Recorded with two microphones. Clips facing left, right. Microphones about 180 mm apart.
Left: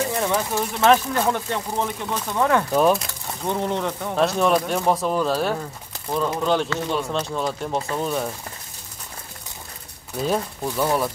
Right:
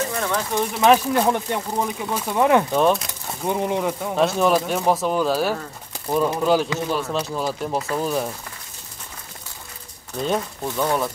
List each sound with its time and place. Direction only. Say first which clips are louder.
0.0 s a sound: left 2 dB; 15° left (ahead or behind)
0.7 s speech: right 1 dB; 15° right (ahead or behind)
2.7 s speech: even; 5° left (ahead or behind)
3.1 s speech: right 2 dB; 10° right (ahead or behind)
10.1 s speech: even; 5° left (ahead or behind)